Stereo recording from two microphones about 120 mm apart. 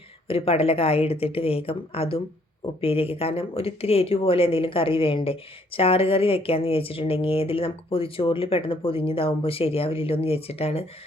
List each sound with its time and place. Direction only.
0.3 s speech: 55° left (ahead or behind)